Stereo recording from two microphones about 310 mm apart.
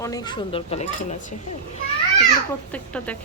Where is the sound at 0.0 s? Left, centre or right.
Centre.